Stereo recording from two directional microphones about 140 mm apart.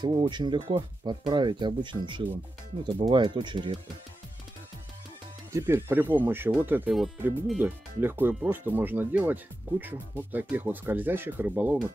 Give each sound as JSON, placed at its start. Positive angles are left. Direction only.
{"t": 0.0, "sound": "speech", "side_deg": -35}
{"t": 5.5, "sound": "speech", "side_deg": -20}